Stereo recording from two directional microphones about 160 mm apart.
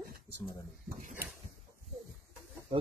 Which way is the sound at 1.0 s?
55° right (ahead or behind).